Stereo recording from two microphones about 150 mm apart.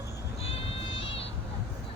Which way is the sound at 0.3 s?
40° left (ahead or behind).